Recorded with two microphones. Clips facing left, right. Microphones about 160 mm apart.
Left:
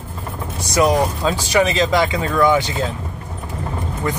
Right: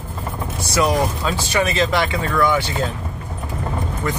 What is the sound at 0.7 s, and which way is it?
Speech, 20° left (ahead or behind).